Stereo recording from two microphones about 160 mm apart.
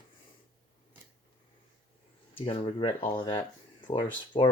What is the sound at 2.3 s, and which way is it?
Speech, 35° left (ahead or behind).